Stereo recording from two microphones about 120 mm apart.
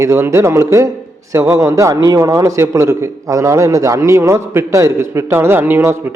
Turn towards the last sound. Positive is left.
turn(degrees=-20)  # may be behind; listen again after turning